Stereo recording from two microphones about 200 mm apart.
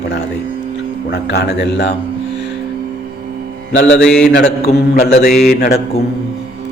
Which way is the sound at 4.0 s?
5° left (ahead or behind).